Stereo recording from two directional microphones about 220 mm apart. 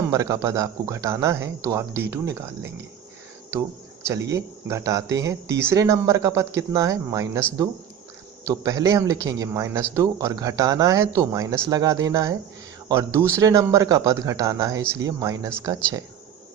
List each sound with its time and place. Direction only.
0.1 s speech: 15° right (ahead or behind)
4.0 s speech: 15° right (ahead or behind)
8.4 s speech: 15° right (ahead or behind)